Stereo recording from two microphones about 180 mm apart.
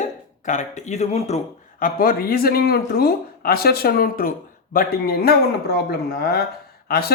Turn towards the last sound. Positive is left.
turn(degrees=60)  # may be behind; listen again after turning